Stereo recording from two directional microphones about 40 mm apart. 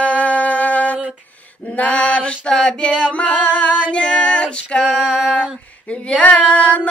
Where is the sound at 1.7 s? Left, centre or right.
Left.